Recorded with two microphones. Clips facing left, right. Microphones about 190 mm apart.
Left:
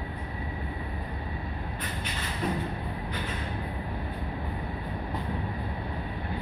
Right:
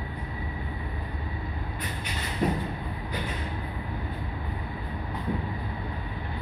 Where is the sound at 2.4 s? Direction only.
40° right (ahead or behind).